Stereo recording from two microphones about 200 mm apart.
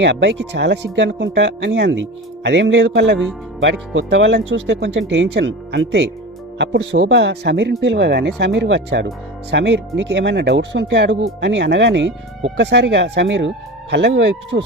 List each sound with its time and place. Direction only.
0.0 s speech: 60° right (ahead or behind)